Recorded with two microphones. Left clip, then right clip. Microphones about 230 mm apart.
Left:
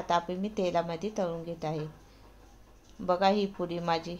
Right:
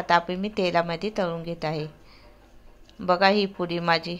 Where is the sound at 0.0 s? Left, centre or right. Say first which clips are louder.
Right 7 dB; centre.